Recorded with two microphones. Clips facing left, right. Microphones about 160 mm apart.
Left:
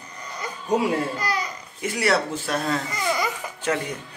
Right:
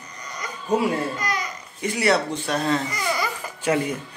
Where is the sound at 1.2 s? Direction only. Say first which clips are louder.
Left 1 dB; 30° left (ahead or behind).